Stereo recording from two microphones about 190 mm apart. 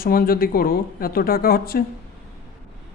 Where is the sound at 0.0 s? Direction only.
50° left (ahead or behind).